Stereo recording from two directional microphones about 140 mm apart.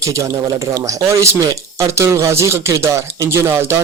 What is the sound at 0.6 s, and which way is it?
Speech, 20° right (ahead or behind).